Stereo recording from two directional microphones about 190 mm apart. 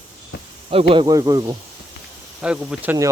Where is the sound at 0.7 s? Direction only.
30° right (ahead or behind).